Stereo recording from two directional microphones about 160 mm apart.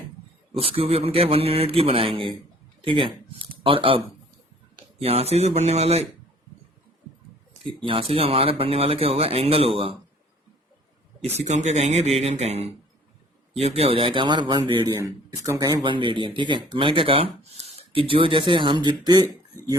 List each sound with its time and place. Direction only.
0.6 s speech: 35° right (ahead or behind)
7.9 s speech: 35° right (ahead or behind)
11.2 s speech: 40° right (ahead or behind); by 19.7 s 20° right (ahead or behind)